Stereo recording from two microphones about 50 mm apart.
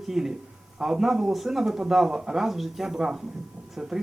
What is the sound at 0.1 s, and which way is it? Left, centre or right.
Speech, centre.